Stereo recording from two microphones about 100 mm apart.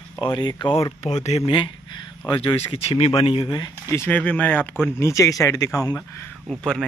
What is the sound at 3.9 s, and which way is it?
Speech, 20° left (ahead or behind).